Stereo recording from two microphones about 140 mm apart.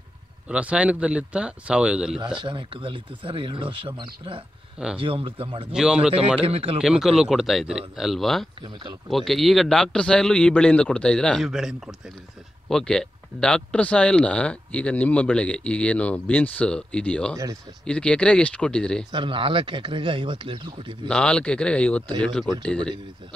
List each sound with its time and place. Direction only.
0.5 s speech: 10° right (ahead or behind)
2.4 s speech: 35° right (ahead or behind)
5.7 s a man's voice: 5° right (ahead or behind)
6.4 s speech: 45° right (ahead or behind)
6.8 s a man's voice: 5° right (ahead or behind)
19.1 s speech: 40° right (ahead or behind)
21.1 s speech: 5° left (ahead or behind)